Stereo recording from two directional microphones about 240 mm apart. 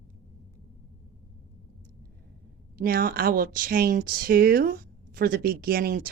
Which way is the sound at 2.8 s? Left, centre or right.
Right.